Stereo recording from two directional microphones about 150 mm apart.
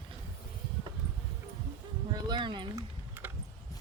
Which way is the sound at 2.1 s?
30° right (ahead or behind).